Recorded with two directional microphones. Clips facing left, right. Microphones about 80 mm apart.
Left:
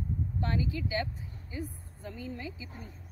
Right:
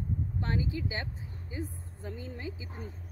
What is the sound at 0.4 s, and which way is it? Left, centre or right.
Speech, right.